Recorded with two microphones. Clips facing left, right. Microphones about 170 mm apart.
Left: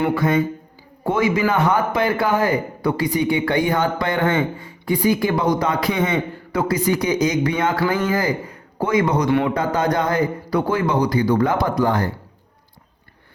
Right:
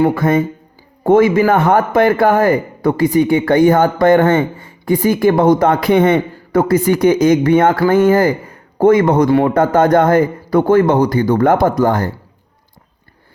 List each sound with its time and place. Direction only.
0.0 s a man's voice: 50° right (ahead or behind)